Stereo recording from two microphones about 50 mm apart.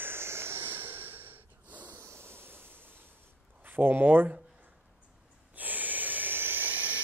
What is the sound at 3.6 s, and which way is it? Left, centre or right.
Speech, right.